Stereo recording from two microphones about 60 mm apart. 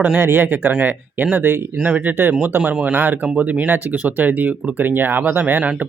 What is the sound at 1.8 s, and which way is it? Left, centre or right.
Speech, right.